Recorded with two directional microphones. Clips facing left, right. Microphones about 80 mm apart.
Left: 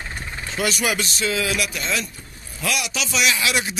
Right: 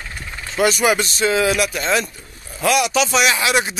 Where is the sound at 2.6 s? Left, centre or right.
Right.